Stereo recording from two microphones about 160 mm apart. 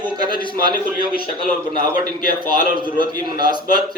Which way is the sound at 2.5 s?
30° right (ahead or behind).